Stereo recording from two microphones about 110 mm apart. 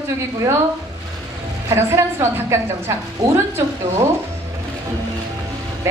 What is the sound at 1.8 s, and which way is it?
A woman's voice, 25° right (ahead or behind).